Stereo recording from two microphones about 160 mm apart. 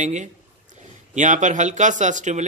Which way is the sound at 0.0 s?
50° right (ahead or behind).